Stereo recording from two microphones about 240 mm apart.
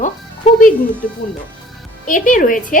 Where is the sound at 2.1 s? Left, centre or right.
Left.